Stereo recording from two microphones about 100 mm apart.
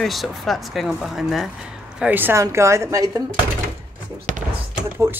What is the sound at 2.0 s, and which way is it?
Speech, 20° right (ahead or behind).